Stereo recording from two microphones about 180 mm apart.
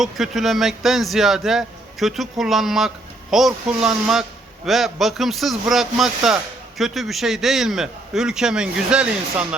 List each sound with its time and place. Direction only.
0.0 s speech: centre (ahead or behind)